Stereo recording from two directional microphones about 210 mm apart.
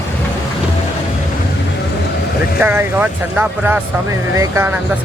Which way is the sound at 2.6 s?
10° right (ahead or behind).